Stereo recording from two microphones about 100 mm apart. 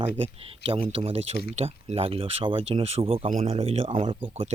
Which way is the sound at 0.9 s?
80° right.